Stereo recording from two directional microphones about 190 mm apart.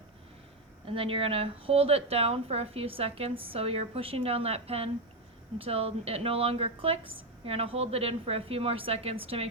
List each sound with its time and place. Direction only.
0.9 s a woman's voice: 30° right (ahead or behind)